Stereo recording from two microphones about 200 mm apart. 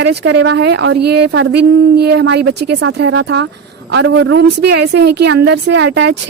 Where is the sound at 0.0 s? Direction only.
55° right (ahead or behind).